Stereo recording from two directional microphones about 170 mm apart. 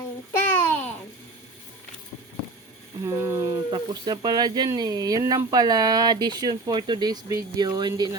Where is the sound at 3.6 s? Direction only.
25° right (ahead or behind).